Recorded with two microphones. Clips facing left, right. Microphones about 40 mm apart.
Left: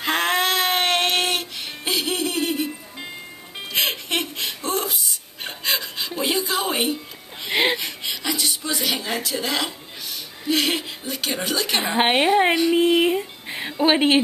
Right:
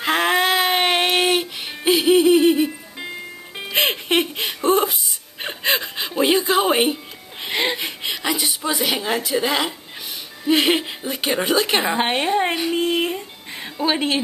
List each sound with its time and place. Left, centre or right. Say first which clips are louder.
0.0 s music: right 3 dB; centre
3.7 s giggle: right 5 dB; right
5.4 s music: right 4 dB; right
7.8 s a sound: right 3 dB; centre
10.5 s chuckle: right 4 dB; right
12.0 s a woman's voice: left 2 dB; centre